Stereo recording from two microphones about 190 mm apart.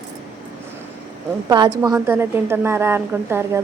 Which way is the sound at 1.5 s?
25° right (ahead or behind).